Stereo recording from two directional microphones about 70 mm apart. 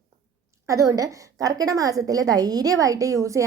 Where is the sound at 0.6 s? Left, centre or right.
Right.